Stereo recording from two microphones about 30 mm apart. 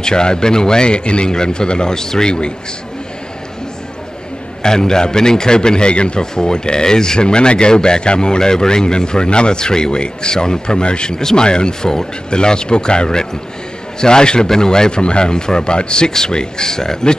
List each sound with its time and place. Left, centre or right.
0.0 s speech: left
4.6 s speech: left
6.3 s speech: left